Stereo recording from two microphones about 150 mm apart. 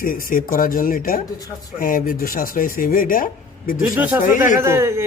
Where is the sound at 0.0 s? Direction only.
70° left (ahead or behind).